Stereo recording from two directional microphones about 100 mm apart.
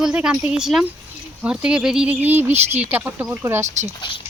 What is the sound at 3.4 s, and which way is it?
Speech, 30° right (ahead or behind).